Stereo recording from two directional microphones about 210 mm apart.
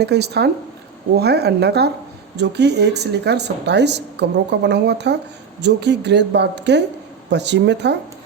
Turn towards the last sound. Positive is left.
turn(degrees=-55)  # may be behind; listen again after turning